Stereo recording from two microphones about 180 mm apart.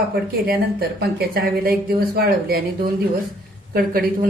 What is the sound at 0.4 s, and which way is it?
Speech, 55° right (ahead or behind).